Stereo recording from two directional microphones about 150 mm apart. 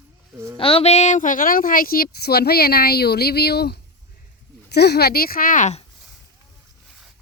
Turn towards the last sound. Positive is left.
turn(degrees=55)  # may be behind; listen again after turning